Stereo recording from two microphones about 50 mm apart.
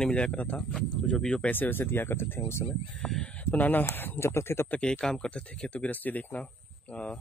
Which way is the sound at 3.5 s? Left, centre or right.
Left.